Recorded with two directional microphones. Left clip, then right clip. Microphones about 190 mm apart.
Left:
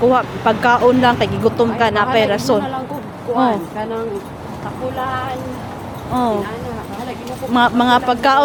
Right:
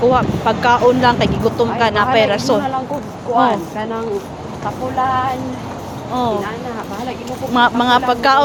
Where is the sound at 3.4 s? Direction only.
15° left (ahead or behind).